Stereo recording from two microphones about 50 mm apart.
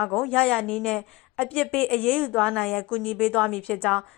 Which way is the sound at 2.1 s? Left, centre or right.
Centre.